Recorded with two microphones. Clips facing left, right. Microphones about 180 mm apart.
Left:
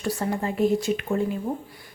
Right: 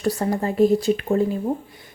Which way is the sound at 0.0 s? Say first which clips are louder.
Right 4 dB; 40° right (ahead or behind).